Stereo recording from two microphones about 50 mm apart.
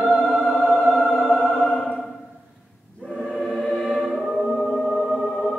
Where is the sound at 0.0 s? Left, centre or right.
Centre.